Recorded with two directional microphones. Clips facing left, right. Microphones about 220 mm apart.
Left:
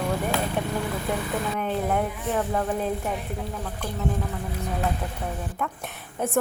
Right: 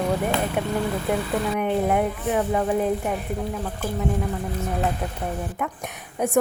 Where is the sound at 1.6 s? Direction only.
15° right (ahead or behind).